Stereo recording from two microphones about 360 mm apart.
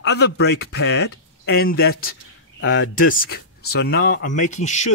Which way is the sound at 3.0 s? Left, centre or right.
Left.